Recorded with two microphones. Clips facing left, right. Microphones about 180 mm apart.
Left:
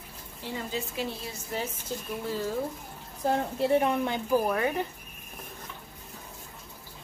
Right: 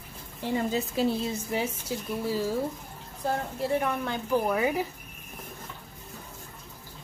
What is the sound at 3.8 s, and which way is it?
Speech, 20° left (ahead or behind).